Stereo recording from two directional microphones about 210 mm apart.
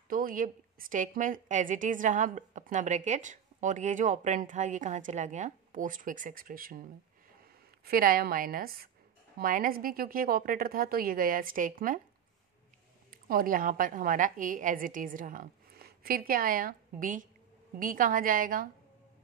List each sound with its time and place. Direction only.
0.1 s a woman's voice: 40° right (ahead or behind)
13.1 s a woman's voice: 40° right (ahead or behind)